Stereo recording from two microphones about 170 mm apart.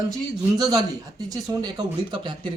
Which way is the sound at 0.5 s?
25° right (ahead or behind).